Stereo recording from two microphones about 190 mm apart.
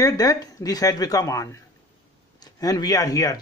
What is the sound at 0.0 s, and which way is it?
Speech, 20° left (ahead or behind).